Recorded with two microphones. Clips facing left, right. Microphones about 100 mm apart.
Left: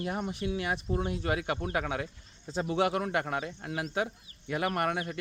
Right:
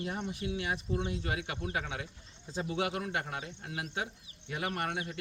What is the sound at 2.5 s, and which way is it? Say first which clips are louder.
Speech: left 4 dB; 80° left.